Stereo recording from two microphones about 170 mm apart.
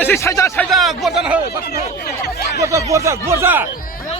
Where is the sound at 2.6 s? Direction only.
20° right (ahead or behind).